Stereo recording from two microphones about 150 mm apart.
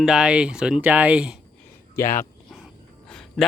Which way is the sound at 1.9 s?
20° left (ahead or behind).